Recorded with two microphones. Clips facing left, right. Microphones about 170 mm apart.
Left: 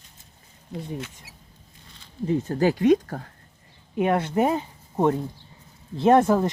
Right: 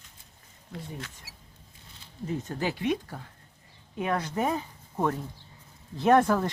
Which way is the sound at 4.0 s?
30° left (ahead or behind).